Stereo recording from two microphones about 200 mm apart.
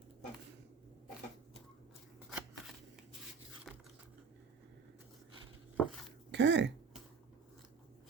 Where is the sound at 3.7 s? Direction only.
Centre (ahead or behind).